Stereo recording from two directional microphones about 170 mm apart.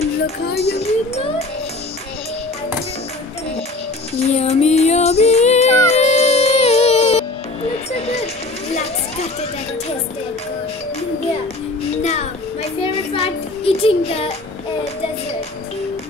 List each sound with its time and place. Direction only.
0.5 s music: 70° left (ahead or behind)
0.7 s music: 35° left (ahead or behind)
4.4 s female singing: 40° left (ahead or behind)
7.9 s music: 40° left (ahead or behind)
12.0 s music: 40° left (ahead or behind)
12.8 s child singing: 35° left (ahead or behind)